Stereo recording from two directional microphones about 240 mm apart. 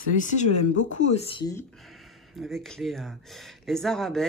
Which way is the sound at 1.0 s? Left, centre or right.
Left.